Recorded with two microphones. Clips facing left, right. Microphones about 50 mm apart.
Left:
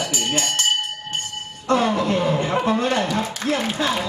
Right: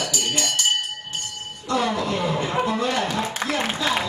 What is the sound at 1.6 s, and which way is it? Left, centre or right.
Speech, left.